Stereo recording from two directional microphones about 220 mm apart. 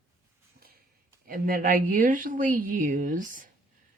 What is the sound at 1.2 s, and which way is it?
A woman's voice, 40° right (ahead or behind).